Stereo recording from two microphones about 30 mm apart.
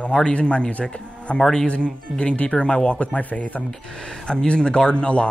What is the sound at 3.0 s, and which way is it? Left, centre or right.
Speech, left.